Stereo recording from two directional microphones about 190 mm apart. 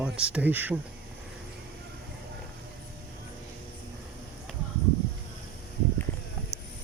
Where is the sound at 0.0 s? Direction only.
5° right (ahead or behind).